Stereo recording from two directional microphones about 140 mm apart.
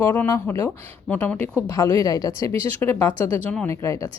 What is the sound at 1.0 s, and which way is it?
Speech, 10° left (ahead or behind).